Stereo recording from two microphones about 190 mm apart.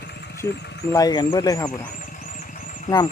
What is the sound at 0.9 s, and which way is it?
Speech, 20° left (ahead or behind).